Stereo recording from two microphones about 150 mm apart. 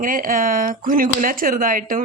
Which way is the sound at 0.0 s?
65° right (ahead or behind).